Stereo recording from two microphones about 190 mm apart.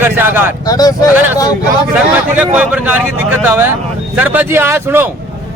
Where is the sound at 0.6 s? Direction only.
20° left (ahead or behind).